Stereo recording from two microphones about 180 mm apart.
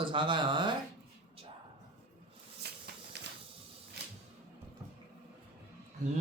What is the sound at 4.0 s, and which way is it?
Music, 65° right (ahead or behind).